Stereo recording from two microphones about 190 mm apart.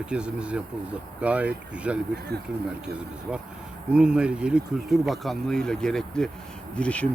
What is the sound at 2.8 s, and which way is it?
Speech, 5° right (ahead or behind).